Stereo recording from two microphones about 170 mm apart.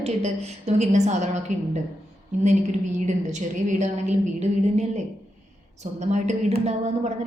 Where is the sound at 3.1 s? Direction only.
45° right (ahead or behind).